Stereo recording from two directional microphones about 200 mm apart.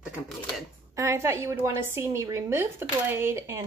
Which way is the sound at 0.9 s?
15° right (ahead or behind).